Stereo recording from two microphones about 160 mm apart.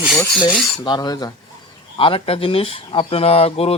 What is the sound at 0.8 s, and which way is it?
Rub, 25° left (ahead or behind).